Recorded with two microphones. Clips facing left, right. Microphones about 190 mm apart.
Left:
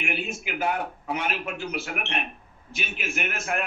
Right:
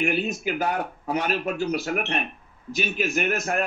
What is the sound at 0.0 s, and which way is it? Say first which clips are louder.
Speech: right 7 dB; 40° right (ahead or behind).